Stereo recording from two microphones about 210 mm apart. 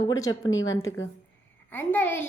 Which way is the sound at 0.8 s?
65° left (ahead or behind).